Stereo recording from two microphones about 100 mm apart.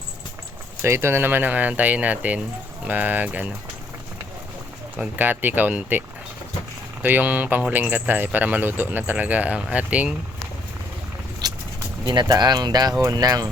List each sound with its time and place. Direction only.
0.8 s speech: 25° right (ahead or behind)
4.9 s speech: 20° right (ahead or behind)
7.0 s speech: 20° right (ahead or behind)
11.4 s a sound: 40° right (ahead or behind)
12.0 s speech: 45° right (ahead or behind)